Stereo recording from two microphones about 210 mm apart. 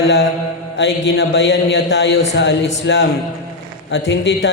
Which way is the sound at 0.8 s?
60° left (ahead or behind).